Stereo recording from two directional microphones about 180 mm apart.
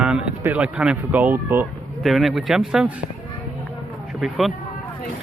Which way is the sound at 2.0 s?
Centre (ahead or behind).